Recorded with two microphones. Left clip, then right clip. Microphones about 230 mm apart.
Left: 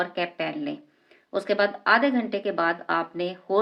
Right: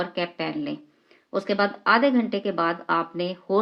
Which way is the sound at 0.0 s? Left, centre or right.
Right.